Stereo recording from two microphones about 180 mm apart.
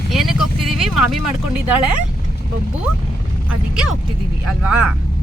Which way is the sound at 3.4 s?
5° right (ahead or behind).